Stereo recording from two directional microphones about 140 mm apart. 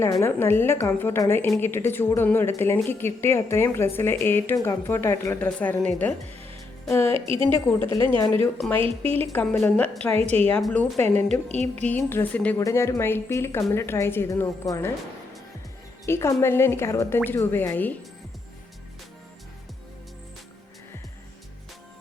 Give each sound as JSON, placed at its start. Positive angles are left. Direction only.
{"t": 0.0, "sound": "speech", "side_deg": 20}
{"t": 7.1, "sound": "a woman's voice", "side_deg": -40}
{"t": 9.3, "sound": "speech", "side_deg": 10}
{"t": 12.5, "sound": "a woman's voice", "side_deg": 20}
{"t": 16.0, "sound": "speech", "side_deg": 20}